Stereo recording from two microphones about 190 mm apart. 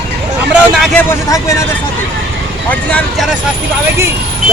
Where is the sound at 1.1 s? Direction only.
15° left (ahead or behind).